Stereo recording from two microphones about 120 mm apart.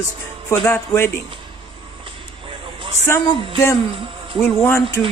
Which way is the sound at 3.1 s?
20° left (ahead or behind).